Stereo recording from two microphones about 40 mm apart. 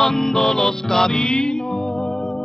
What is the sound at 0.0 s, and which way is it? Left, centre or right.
Music, centre.